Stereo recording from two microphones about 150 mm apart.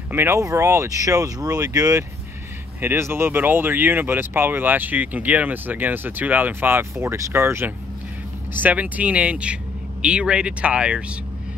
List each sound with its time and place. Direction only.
0.1 s speech: 15° right (ahead or behind)